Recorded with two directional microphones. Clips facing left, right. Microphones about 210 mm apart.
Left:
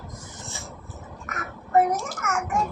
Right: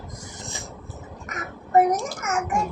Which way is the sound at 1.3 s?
20° right (ahead or behind).